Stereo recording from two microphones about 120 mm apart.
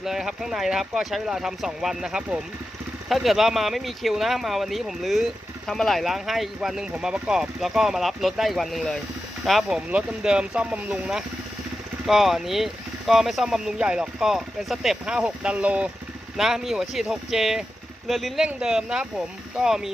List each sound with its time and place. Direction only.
0.0 s speech: 5° right (ahead or behind)